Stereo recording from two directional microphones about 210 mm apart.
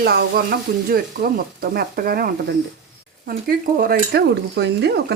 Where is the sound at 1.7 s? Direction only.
45° right (ahead or behind).